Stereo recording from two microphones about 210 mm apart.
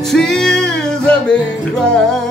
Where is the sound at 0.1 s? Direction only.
Centre (ahead or behind).